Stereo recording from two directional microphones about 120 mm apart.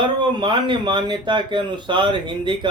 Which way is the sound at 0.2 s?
40° right (ahead or behind).